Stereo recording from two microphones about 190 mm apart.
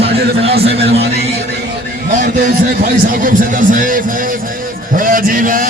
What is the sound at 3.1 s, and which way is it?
Speech, 45° right (ahead or behind).